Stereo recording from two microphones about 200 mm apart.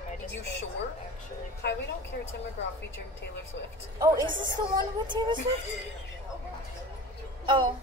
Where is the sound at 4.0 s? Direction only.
20° right (ahead or behind).